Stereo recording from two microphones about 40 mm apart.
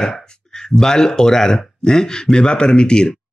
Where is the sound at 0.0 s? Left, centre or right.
Centre.